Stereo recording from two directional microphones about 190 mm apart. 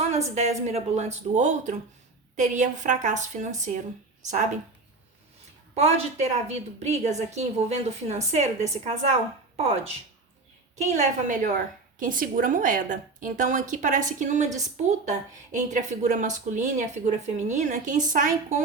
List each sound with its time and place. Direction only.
0.3 s speech: 35° right (ahead or behind)
5.7 s a woman's voice: 35° right (ahead or behind)